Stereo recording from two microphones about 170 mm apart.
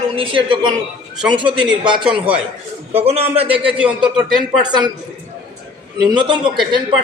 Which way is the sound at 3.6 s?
5° right (ahead or behind).